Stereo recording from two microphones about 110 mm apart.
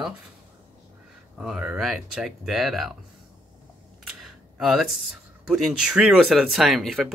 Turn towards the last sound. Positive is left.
turn(degrees=0)  # may be behind; listen again after turning